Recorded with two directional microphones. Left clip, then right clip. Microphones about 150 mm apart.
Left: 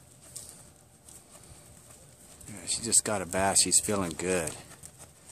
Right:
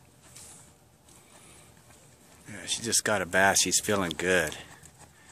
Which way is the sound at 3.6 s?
45° left (ahead or behind).